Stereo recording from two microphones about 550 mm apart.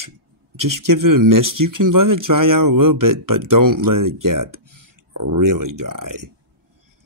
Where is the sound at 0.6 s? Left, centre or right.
Right.